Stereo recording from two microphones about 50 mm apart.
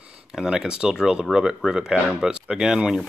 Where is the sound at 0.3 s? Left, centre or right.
Centre.